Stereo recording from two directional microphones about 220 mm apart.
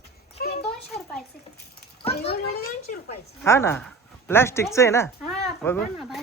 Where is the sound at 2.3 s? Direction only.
45° left (ahead or behind).